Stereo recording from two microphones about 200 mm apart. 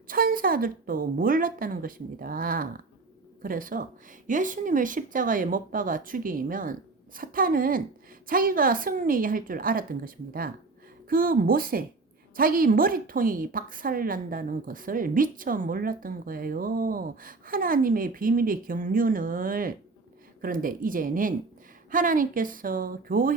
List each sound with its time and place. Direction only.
0.1 s a woman's voice: 45° right (ahead or behind)